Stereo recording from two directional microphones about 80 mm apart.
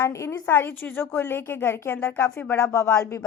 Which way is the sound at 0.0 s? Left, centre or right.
Left.